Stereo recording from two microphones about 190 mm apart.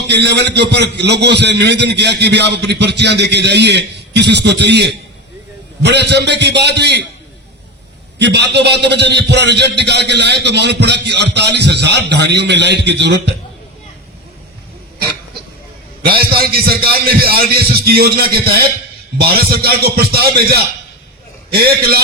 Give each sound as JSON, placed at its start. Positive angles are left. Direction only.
{"t": 0.1, "sound": "a man's voice", "side_deg": -60}
{"t": 8.2, "sound": "a man's voice", "side_deg": -65}
{"t": 16.0, "sound": "a man's voice", "side_deg": -55}